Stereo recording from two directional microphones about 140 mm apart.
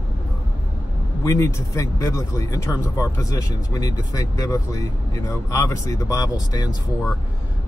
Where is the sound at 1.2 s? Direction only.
20° left (ahead or behind).